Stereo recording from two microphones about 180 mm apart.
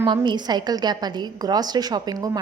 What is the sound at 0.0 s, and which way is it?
A woman's voice, 25° right (ahead or behind).